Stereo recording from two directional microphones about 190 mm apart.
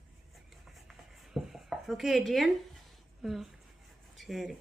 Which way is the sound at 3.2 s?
Centre (ahead or behind).